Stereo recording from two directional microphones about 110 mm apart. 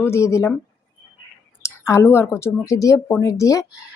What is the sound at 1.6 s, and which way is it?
A woman's voice, 25° left (ahead or behind).